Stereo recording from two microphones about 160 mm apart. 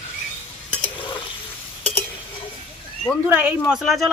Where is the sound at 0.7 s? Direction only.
30° left (ahead or behind).